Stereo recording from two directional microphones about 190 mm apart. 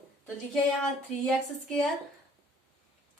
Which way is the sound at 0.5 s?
Centre (ahead or behind).